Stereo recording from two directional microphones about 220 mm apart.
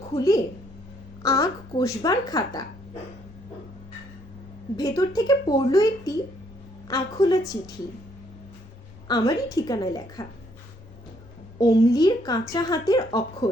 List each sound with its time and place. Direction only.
1.2 s speech: 15° left (ahead or behind)
4.8 s speech: 15° left (ahead or behind)
9.0 s speech: 15° left (ahead or behind)
11.6 s speech: 15° left (ahead or behind)